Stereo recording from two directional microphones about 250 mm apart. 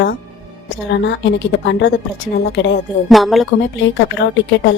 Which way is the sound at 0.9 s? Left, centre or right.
Left.